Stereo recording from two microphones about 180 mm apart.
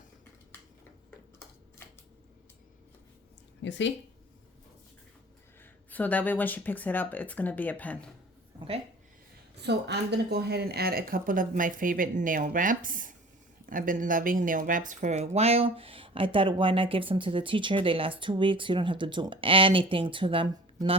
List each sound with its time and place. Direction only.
1.8 s a sound: 15° left (ahead or behind)
3.6 s speech: 90° left
5.9 s speech: 10° left (ahead or behind)
9.6 s speech: 70° right (ahead or behind); by 20.6 s 30° right (ahead or behind)